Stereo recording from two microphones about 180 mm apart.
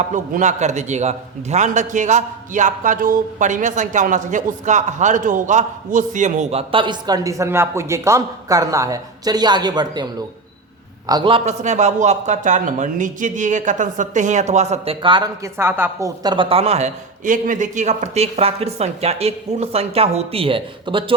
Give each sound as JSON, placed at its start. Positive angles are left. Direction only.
{"t": 0.0, "sound": "a man's voice", "side_deg": -40}
{"t": 15.5, "sound": "a man's voice", "side_deg": -15}